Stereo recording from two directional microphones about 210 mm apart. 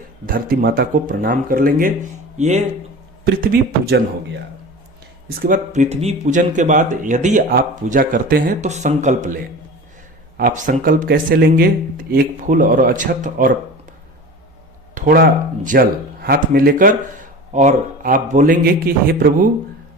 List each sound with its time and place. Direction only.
0.3 s a man's voice: 45° right (ahead or behind)
3.2 s speech: 45° right (ahead or behind)
5.4 s a man's voice: 40° right (ahead or behind)
14.9 s a man's voice: 45° right (ahead or behind)